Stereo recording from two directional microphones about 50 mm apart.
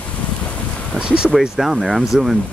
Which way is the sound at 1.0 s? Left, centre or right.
Centre.